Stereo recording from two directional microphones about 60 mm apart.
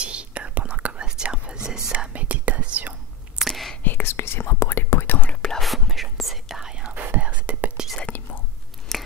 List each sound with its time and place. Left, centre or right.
0.0 s whispering: centre
3.3 s whispering: centre
3.8 s whispering: left
5.5 s whispering: centre
7.2 s whispering: right
8.1 s whispering: left
8.9 s scissors: centre